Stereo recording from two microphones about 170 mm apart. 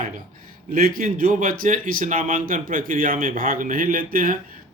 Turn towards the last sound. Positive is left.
turn(degrees=-55)  # may be behind; listen again after turning